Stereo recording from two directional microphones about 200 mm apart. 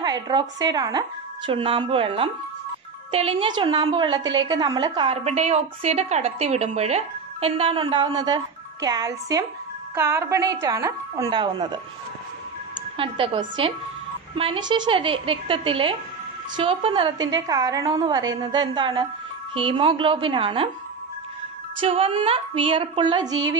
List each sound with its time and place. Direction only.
0.0 s a woman's voice: 20° right (ahead or behind)
21.7 s speech: 30° right (ahead or behind)